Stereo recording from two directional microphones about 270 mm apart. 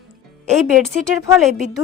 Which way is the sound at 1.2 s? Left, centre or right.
Centre.